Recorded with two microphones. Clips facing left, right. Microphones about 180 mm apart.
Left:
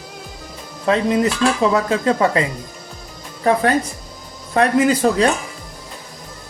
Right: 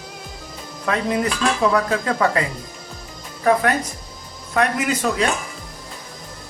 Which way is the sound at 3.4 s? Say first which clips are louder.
Left 1 dB; 30° left (ahead or behind).